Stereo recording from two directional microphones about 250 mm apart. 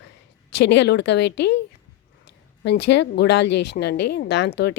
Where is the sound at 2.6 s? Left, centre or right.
Left.